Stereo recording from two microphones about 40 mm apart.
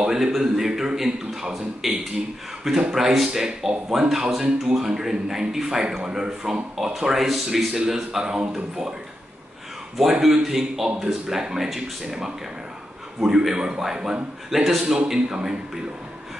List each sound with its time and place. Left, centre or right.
0.0 s a man's voice: centre
9.9 s a man's voice: centre
14.5 s a man's voice: centre
15.0 s a man's voice: centre